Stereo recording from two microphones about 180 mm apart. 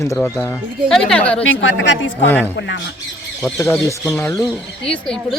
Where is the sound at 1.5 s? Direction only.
85° left.